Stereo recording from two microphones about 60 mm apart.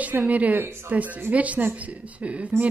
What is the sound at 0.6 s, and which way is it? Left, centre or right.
Speech, right.